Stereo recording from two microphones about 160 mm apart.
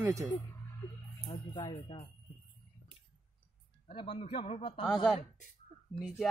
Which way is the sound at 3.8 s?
35° left (ahead or behind).